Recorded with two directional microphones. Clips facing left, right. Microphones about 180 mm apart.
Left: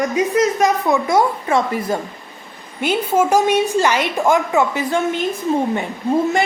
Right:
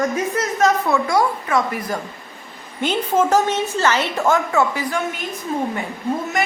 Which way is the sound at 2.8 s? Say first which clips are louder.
Left 2 dB; 10° left (ahead or behind).